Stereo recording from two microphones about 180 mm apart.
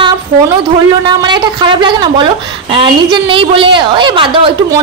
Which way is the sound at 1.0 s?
25° right (ahead or behind).